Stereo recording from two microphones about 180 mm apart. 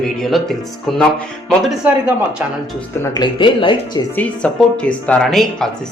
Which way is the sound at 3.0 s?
25° left (ahead or behind).